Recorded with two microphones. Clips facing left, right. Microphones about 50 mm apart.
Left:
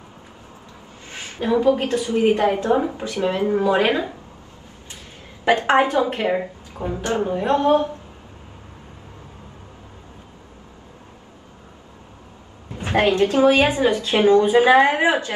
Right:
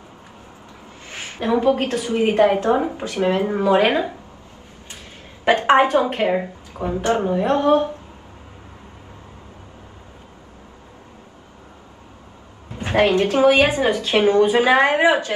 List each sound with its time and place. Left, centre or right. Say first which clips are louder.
1.0 s a woman's voice: even; right
5.4 s a woman's voice: right 2 dB; right
12.7 s a woman's voice: right 1 dB; right